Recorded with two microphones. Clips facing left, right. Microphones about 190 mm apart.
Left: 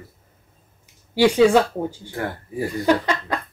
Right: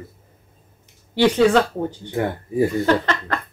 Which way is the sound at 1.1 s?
10° left (ahead or behind).